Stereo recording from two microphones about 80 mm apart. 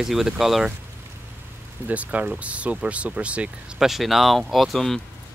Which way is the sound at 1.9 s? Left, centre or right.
Centre.